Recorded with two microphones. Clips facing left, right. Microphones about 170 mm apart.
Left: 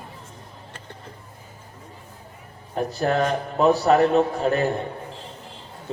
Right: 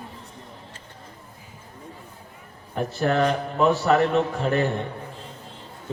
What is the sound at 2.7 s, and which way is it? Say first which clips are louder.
A man's voice: left 1 dB; 35° left (ahead or behind).